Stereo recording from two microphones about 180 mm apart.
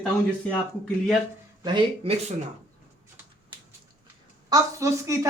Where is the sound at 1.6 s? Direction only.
30° right (ahead or behind).